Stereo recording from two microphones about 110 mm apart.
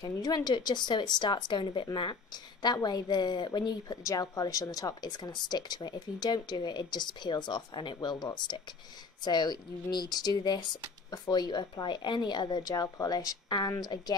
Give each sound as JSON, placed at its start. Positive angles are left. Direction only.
{"t": 0.0, "sound": "a woman's voice", "side_deg": 40}